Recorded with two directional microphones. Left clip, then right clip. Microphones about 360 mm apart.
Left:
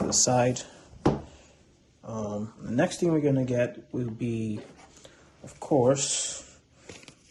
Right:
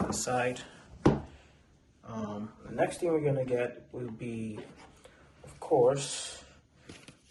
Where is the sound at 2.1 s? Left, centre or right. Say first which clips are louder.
Left 5 dB; centre.